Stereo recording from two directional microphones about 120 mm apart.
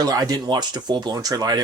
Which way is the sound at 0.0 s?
30° right (ahead or behind).